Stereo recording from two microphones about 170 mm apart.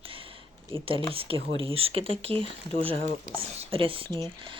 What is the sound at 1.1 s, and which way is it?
Speech, 35° right (ahead or behind).